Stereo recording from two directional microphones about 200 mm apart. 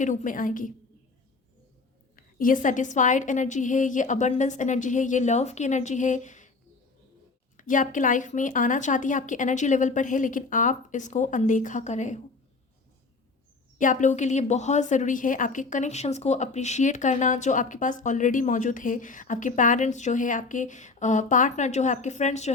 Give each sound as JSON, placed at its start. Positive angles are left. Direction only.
{"t": 0.0, "sound": "a woman's voice", "side_deg": 40}
{"t": 2.1, "sound": "a woman's voice", "side_deg": 45}
{"t": 7.5, "sound": "a woman's voice", "side_deg": 40}
{"t": 13.7, "sound": "a woman's voice", "side_deg": 40}